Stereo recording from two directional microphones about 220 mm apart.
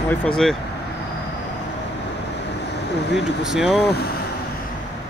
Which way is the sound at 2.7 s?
50° left (ahead or behind).